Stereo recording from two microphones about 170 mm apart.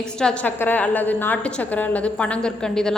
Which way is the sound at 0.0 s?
5° left (ahead or behind).